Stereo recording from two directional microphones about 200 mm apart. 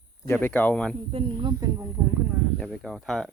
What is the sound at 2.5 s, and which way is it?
Speech, 5° left (ahead or behind).